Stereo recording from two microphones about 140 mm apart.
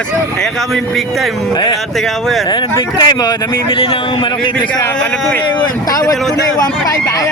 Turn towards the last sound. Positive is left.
turn(degrees=25)  # may be behind; listen again after turning